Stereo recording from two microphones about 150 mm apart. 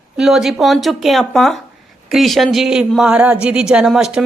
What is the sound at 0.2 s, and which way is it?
A woman's voice, 5° right (ahead or behind).